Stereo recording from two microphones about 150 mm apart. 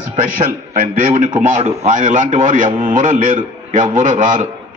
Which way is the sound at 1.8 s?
60° right (ahead or behind).